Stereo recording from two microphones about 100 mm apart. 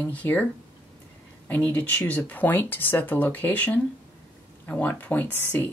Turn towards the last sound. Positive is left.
turn(degrees=20)  # may be behind; listen again after turning